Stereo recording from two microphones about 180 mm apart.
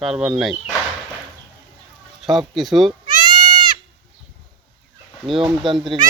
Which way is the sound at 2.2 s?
Centre (ahead or behind).